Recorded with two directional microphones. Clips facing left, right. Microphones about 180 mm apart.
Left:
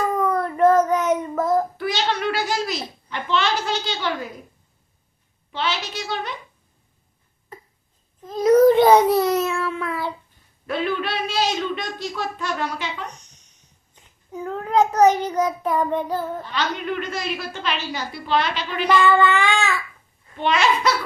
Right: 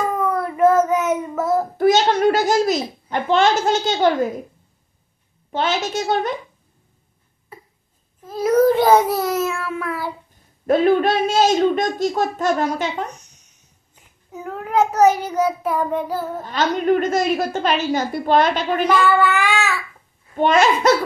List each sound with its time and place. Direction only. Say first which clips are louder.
0.2 s child singing: right 2 dB; 10° right (ahead or behind)
1.8 s a child's voice: right 9 dB; 45° right (ahead or behind)
5.5 s a woman's voice: right 6 dB; 45° right (ahead or behind)
7.5 s a sound: even; 10° right (ahead or behind)
8.3 s a child's voice: left 2 dB; 5° right (ahead or behind)
8.8 s child singing: left 1 dB; centre (ahead or behind)
10.7 s a woman's voice: right 9 dB; 45° right (ahead or behind)
14.3 s a child's voice: even; 5° right (ahead or behind)
16.4 s a woman's voice: right 7 dB; 45° right (ahead or behind)
19.0 s a child's voice: even; 5° right (ahead or behind)
20.3 s a woman's voice: right 5 dB; 45° right (ahead or behind)